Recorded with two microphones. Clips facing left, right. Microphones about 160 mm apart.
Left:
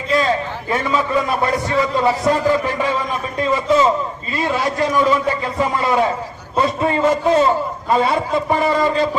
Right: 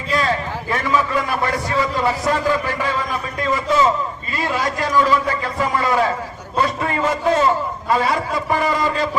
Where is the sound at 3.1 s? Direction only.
25° left (ahead or behind).